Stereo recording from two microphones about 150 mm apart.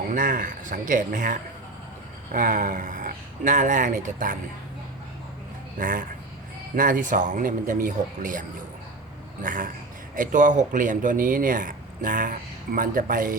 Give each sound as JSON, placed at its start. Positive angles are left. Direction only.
{"t": 0.1, "sound": "speech", "side_deg": -60}
{"t": 5.8, "sound": "speech", "side_deg": -65}